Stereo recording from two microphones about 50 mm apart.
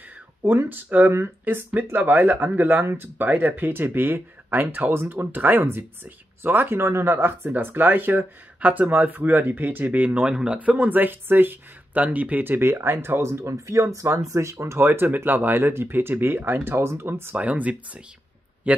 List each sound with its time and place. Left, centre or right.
0.4 s speech: right
5.6 s speech: right
6.8 s speech: right
8.5 s speech: right
10.2 s speech: centre
10.6 s speech: right
11.9 s speech: right
15.1 s speech: right
17.4 s speech: right